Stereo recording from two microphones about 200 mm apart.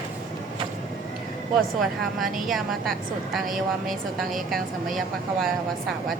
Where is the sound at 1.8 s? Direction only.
Centre (ahead or behind).